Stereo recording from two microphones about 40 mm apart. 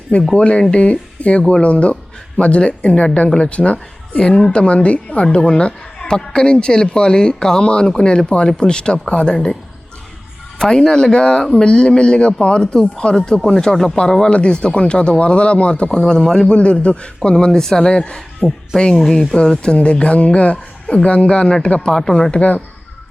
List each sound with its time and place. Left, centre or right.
0.3 s speech: left
10.6 s speech: centre
15.9 s speech: centre
16.5 s speech: left
17.4 s speech: centre
17.9 s speech: left
18.8 s speech: centre
22.3 s speech: left